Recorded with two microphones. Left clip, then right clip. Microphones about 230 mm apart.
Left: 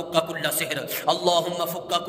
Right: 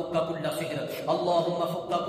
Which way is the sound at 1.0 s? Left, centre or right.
Left.